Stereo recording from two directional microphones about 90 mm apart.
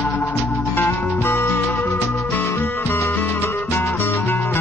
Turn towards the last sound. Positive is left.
turn(degrees=20)  # may be behind; listen again after turning